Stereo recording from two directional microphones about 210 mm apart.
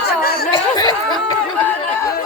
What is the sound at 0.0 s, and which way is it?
Chatter, 45° left (ahead or behind).